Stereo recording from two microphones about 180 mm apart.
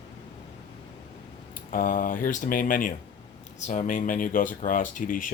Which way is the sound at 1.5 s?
50° left (ahead or behind).